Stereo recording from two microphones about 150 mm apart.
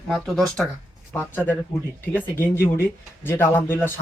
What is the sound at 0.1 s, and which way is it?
Speech, centre (ahead or behind).